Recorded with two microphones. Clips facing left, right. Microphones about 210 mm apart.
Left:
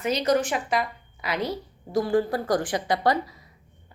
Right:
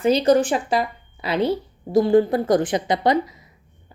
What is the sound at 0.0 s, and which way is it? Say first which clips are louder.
A woman's voice: right 7 dB; 30° right (ahead or behind).